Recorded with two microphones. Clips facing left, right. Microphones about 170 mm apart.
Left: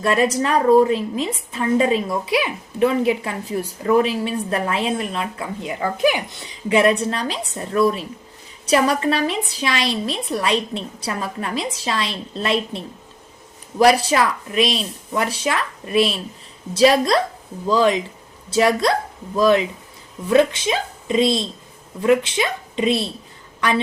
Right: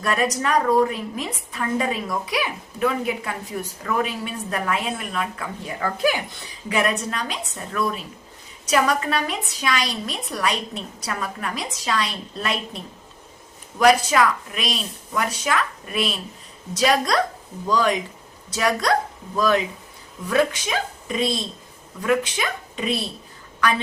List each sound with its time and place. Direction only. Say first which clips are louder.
0.0 s a woman's voice: left 4 dB; 25° left (ahead or behind)
6.7 s a woman's voice: left 7 dB; 30° left (ahead or behind)